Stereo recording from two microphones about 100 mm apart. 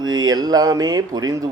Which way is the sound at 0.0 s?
40° right (ahead or behind).